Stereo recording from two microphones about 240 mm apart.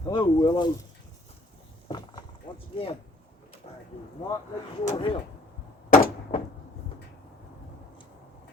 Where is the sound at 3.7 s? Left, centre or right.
Left.